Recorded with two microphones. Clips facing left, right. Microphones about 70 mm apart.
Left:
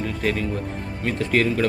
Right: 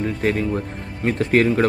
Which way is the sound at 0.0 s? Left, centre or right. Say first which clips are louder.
Right 3 dB; right.